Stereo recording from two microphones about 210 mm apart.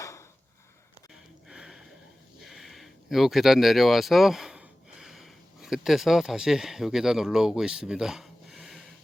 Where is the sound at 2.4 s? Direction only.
Centre (ahead or behind).